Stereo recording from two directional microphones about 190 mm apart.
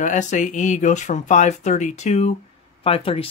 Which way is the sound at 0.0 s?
40° left (ahead or behind).